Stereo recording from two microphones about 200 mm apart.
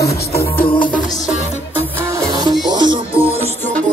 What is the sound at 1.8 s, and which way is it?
Music, 15° right (ahead or behind).